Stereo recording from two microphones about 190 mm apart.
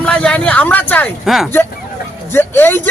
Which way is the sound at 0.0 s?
5° left (ahead or behind).